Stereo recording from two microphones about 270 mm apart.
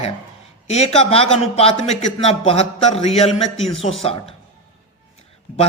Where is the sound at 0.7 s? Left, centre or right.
Left.